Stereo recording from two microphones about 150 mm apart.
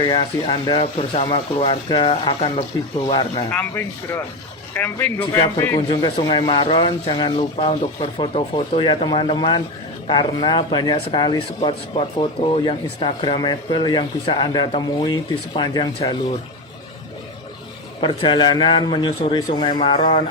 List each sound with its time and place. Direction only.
0.0 s speech: 35° left (ahead or behind)
3.5 s a man's voice: 10° left (ahead or behind); by 16.1 s 30° left (ahead or behind)
18.0 s a man's voice: 35° left (ahead or behind)